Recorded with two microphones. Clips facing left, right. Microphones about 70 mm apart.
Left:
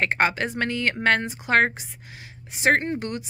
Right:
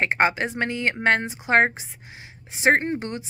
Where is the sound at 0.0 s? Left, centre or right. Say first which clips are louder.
Right 1 dB; centre.